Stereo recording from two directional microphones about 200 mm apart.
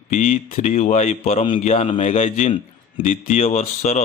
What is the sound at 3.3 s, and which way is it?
Speech, 30° left (ahead or behind).